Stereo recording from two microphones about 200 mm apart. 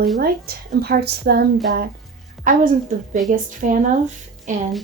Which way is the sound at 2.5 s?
45° right (ahead or behind).